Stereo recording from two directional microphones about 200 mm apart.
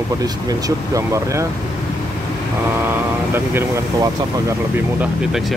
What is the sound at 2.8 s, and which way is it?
Speech, 10° right (ahead or behind).